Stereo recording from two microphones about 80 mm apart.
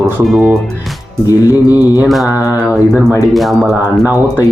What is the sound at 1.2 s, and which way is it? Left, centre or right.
Music, right.